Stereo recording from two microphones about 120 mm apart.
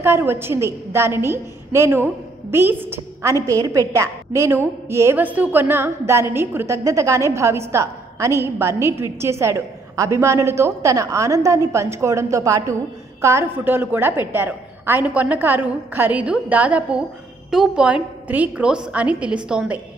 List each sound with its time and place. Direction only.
0.0 s a woman's voice: 20° right (ahead or behind)